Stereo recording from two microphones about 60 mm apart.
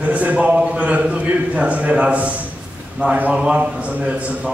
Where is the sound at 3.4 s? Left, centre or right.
Centre.